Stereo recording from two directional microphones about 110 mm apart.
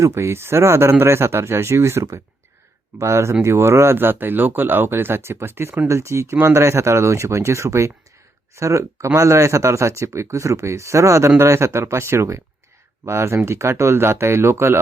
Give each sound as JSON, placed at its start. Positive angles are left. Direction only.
{"t": 0.0, "sound": "speech", "side_deg": -25}